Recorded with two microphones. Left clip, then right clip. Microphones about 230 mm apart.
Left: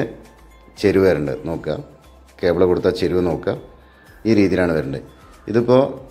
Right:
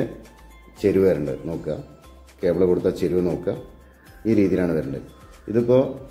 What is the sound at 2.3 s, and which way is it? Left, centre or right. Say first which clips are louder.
A man's voice: left 3 dB; centre.